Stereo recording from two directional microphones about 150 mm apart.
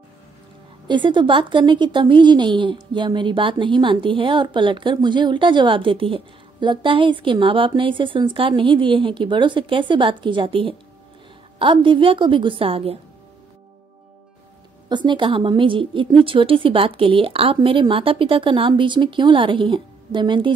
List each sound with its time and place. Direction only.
0.8 s a woman's voice: 30° right (ahead or behind)
14.9 s a woman's voice: 30° right (ahead or behind)